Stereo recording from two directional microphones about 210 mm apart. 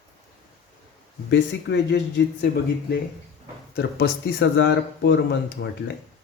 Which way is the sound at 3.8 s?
55° left (ahead or behind).